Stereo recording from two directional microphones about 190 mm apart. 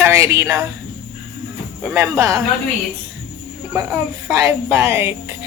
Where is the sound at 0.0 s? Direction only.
15° right (ahead or behind).